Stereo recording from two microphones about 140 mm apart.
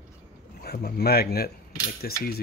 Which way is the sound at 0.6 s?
90° left.